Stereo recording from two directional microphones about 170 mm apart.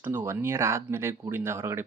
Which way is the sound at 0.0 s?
10° right (ahead or behind).